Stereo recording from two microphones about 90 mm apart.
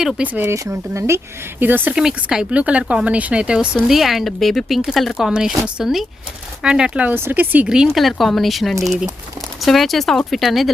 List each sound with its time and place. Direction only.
0.2 s speech: 20° right (ahead or behind)
0.5 s speech: 35° right (ahead or behind)
2.0 s speech: 5° right (ahead or behind)
7.7 s speech: 5° right (ahead or behind)